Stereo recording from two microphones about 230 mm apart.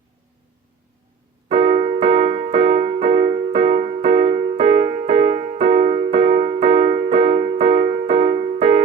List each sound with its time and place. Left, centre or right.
1.5 s keyboard: right